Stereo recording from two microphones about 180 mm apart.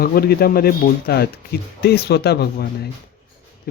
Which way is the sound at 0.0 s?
55° left (ahead or behind).